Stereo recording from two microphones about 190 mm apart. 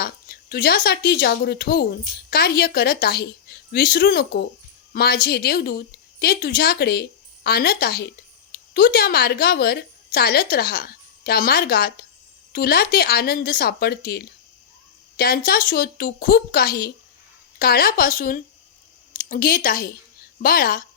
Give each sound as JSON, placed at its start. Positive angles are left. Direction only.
{"t": 0.0, "sound": "a woman's voice", "side_deg": 55}